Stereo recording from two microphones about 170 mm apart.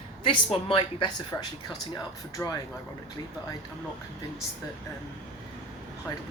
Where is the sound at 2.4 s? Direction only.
10° left (ahead or behind).